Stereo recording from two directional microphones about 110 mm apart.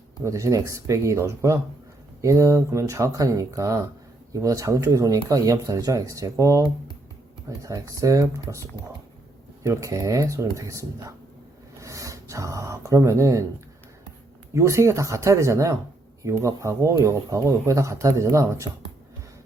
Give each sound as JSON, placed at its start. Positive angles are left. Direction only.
{"t": 0.2, "sound": "speech", "side_deg": -30}
{"t": 7.6, "sound": "speech", "side_deg": -30}
{"t": 9.6, "sound": "speech", "side_deg": -30}
{"t": 14.5, "sound": "speech", "side_deg": -25}